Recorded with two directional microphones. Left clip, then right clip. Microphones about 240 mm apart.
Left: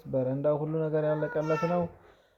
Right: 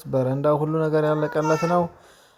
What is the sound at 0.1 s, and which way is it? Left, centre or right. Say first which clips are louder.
Speech: right 7 dB; right.